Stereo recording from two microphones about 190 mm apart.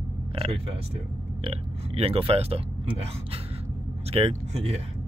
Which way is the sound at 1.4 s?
30° right (ahead or behind).